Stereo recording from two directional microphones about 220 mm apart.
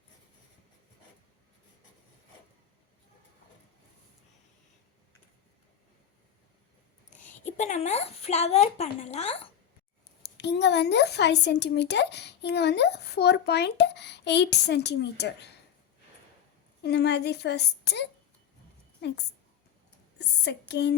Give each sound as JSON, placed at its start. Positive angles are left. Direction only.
{"t": 7.2, "sound": "a woman's voice", "side_deg": 35}
{"t": 10.3, "sound": "speech", "side_deg": 50}
{"t": 16.8, "sound": "speech", "side_deg": 50}
{"t": 20.1, "sound": "speech", "side_deg": 50}